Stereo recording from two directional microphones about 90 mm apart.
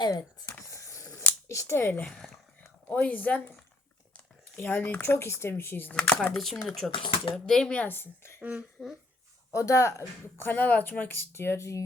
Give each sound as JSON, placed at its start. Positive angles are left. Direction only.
{"t": 0.7, "sound": "a sound", "side_deg": 35}
{"t": 1.5, "sound": "speech", "side_deg": 30}
{"t": 2.0, "sound": "a woman's voice", "side_deg": 10}
{"t": 4.5, "sound": "speech", "side_deg": 20}
{"t": 5.9, "sound": "a woman's voice", "side_deg": 15}
{"t": 6.3, "sound": "speech", "side_deg": 0}
{"t": 6.9, "sound": "speech", "side_deg": 80}
{"t": 7.4, "sound": "a woman's voice", "side_deg": 5}
{"t": 8.4, "sound": "speech", "side_deg": -20}
{"t": 9.5, "sound": "speech", "side_deg": 35}
{"t": 10.3, "sound": "speech", "side_deg": 25}